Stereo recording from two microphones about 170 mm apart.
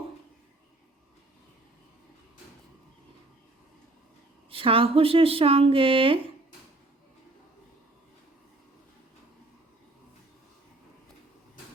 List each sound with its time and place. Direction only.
4.5 s speech: 30° right (ahead or behind)